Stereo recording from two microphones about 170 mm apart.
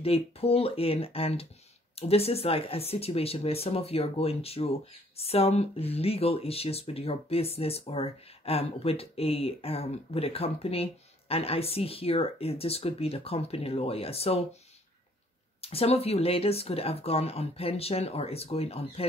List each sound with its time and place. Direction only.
0.0 s speech: 35° left (ahead or behind)
15.6 s speech: 35° left (ahead or behind)